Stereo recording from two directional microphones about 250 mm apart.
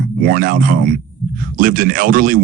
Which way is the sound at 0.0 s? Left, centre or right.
Right.